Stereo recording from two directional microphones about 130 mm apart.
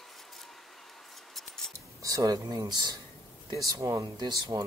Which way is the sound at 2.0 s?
25° right (ahead or behind).